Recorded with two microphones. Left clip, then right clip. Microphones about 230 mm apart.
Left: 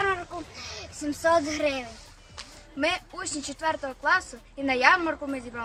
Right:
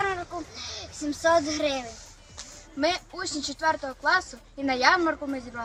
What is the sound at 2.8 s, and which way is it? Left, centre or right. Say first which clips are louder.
Speech: right 1 dB; centre.